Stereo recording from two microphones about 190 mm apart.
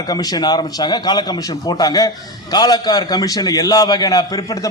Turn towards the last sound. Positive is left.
turn(degrees=20)  # may be behind; listen again after turning